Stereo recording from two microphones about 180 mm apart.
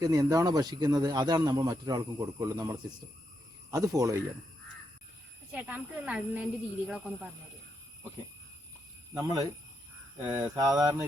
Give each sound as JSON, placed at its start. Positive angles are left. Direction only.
{"t": 0.0, "sound": "speech", "side_deg": -20}
{"t": 5.5, "sound": "speech", "side_deg": -10}
{"t": 9.1, "sound": "speech", "side_deg": -20}
{"t": 10.5, "sound": "speech", "side_deg": -20}